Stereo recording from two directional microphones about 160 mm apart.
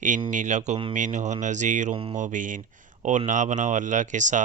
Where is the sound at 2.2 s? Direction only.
55° right (ahead or behind).